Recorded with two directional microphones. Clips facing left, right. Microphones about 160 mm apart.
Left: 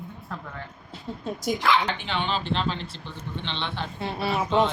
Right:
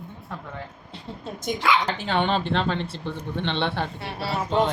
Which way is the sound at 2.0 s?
55° right (ahead or behind).